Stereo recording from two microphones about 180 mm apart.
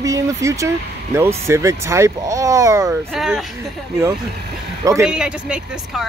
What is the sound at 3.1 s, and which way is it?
Speech, centre (ahead or behind).